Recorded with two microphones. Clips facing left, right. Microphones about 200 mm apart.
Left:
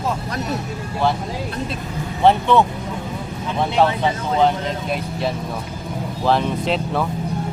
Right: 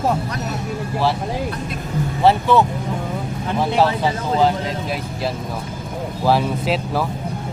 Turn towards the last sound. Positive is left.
turn(degrees=-5)  # may be behind; listen again after turning